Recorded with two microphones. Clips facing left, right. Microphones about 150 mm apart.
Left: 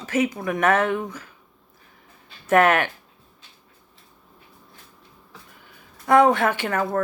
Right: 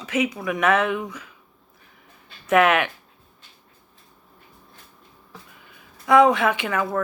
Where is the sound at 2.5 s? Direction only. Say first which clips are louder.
Even; 45° left (ahead or behind).